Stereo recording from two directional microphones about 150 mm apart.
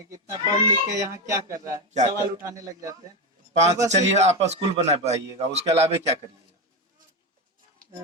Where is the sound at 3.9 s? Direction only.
50° right (ahead or behind).